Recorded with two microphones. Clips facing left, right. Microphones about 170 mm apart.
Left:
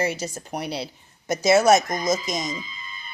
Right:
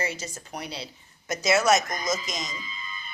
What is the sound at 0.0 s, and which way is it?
Speech, 60° left (ahead or behind).